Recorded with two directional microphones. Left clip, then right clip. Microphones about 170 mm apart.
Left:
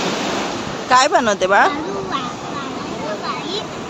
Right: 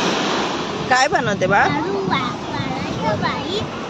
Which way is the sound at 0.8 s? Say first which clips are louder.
Left 4 dB; 25° left (ahead or behind).